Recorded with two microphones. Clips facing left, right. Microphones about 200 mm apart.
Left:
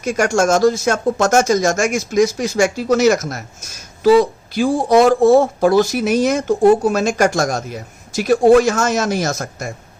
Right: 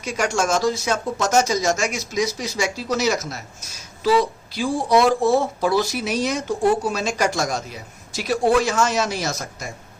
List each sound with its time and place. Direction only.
0.0 s speech: 45° left (ahead or behind)